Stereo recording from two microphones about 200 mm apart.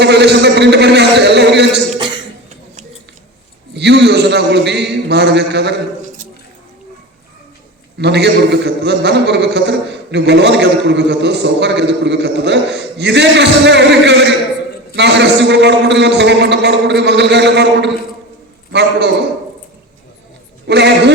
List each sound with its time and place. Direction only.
0.0 s a man's voice: 55° right (ahead or behind)
3.8 s a sound: 60° right (ahead or behind)
7.9 s a man's voice: 55° right (ahead or behind)
20.7 s a man's voice: 60° right (ahead or behind)